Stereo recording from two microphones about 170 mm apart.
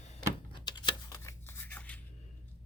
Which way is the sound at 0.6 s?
25° left (ahead or behind).